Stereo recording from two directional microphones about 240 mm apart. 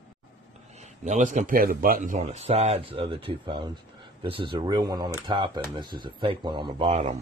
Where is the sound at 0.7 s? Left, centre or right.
Right.